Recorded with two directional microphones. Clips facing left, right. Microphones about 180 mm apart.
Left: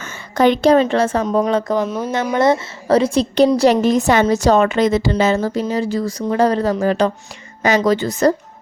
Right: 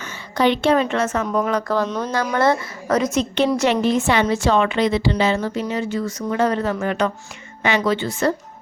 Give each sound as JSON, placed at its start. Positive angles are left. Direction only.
{"t": 0.0, "sound": "a woman's voice", "side_deg": 45}
{"t": 1.9, "sound": "speech", "side_deg": 5}
{"t": 2.2, "sound": "speech", "side_deg": 20}
{"t": 2.8, "sound": "a woman's voice", "side_deg": 30}